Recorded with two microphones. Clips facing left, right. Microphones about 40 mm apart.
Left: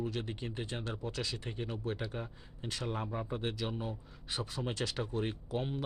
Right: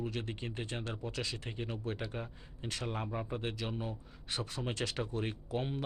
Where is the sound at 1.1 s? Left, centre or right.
Centre.